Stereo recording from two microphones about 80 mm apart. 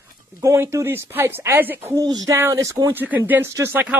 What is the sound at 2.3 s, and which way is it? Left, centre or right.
Speech, right.